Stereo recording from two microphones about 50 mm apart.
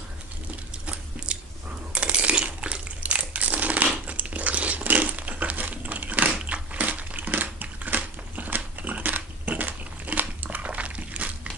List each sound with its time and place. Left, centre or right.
0.8 s biting: right
1.9 s a sound: right
3.0 s crushing: right